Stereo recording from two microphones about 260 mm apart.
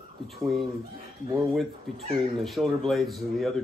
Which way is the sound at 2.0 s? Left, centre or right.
Right.